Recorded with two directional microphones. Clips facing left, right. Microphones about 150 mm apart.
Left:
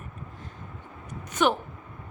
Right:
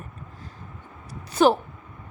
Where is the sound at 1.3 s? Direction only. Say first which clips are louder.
Right 6 dB; 35° right (ahead or behind).